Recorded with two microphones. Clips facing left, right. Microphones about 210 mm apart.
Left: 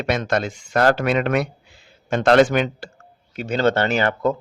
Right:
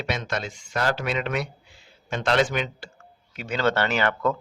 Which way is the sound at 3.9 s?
40° left (ahead or behind).